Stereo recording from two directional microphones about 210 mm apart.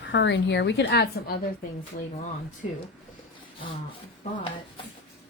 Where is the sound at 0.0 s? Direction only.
60° left (ahead or behind).